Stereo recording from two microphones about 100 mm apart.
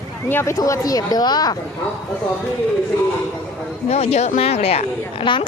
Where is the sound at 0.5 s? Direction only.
35° left (ahead or behind).